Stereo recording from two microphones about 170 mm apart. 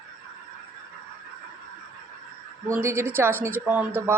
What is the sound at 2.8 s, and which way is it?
A woman's voice, 15° right (ahead or behind).